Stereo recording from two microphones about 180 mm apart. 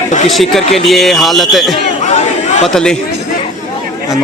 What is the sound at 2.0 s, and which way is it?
Chatter, 40° left (ahead or behind).